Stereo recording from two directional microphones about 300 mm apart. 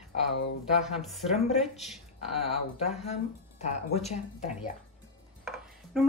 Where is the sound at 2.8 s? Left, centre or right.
Left.